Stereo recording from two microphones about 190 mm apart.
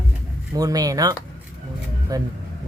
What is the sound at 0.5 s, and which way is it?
Speech, 20° right (ahead or behind).